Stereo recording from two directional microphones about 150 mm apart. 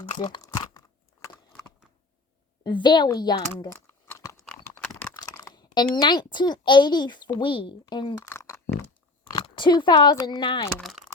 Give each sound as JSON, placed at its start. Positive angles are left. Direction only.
{"t": 0.2, "sound": "speech", "side_deg": 30}
{"t": 0.5, "sound": "a sound", "side_deg": 25}
{"t": 2.6, "sound": "speech", "side_deg": 30}
{"t": 3.7, "sound": "crumpling", "side_deg": 15}
{"t": 4.7, "sound": "typing", "side_deg": 5}
{"t": 5.1, "sound": "a child's voice", "side_deg": 30}
{"t": 8.2, "sound": "a sound", "side_deg": 20}
{"t": 9.3, "sound": "speech", "side_deg": 30}
{"t": 10.7, "sound": "speech", "side_deg": 10}